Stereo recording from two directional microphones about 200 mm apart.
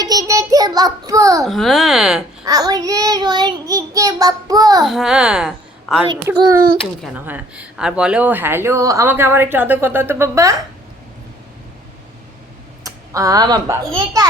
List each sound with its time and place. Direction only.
0.0 s child singing: 15° right (ahead or behind)
1.5 s speech: centre (ahead or behind)
2.4 s child singing: 20° right (ahead or behind)
4.9 s a woman's voice: centre (ahead or behind)
6.1 s speech: 20° right (ahead or behind)
12.8 s a child's voice: 15° right (ahead or behind)